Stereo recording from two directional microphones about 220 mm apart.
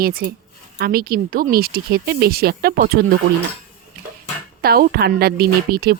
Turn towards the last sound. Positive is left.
turn(degrees=-45)  # may be behind; listen again after turning